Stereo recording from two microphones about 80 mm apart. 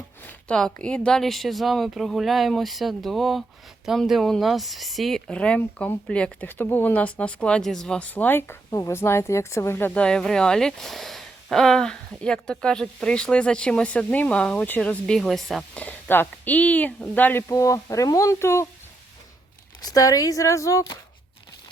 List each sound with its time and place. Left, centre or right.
0.5 s speech: centre
5.3 s speech: centre
6.5 s speech: left
9.9 s speech: centre
15.7 s speech: centre
17.5 s speech: left
19.8 s speech: left